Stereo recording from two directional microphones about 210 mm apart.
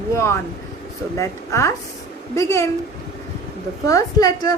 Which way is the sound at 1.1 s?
15° left (ahead or behind).